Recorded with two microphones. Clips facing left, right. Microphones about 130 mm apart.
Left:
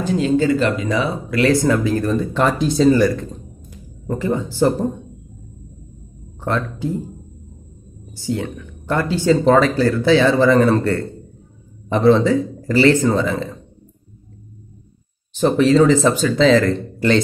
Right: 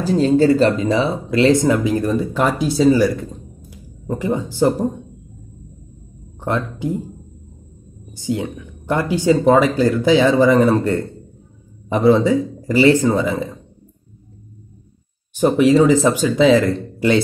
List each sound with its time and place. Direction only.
0.0 s speech: 35° right (ahead or behind); by 4.8 s 15° right (ahead or behind)
6.4 s speech: 15° right (ahead or behind)
8.1 s speech: 15° right (ahead or behind)
15.3 s speech: 15° right (ahead or behind)